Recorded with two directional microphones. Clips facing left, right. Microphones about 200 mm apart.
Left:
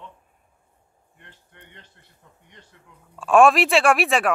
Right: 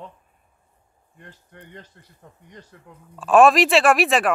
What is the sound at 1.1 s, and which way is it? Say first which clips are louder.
Speech: right 7 dB; 40° right (ahead or behind).